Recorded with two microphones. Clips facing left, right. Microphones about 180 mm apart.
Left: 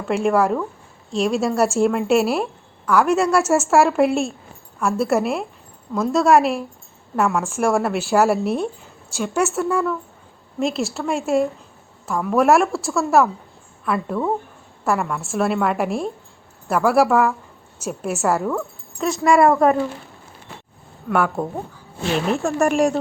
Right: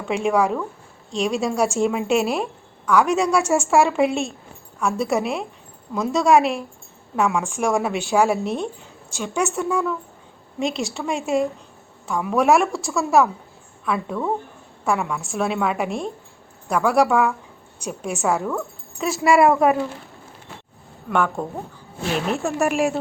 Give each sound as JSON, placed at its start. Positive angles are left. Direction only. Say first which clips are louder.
{"t": 0.0, "sound": "a woman's voice", "louder": "left 2 dB", "side_deg": 0}
{"t": 21.1, "sound": "a woman's voice", "louder": "left 2 dB", "side_deg": 5}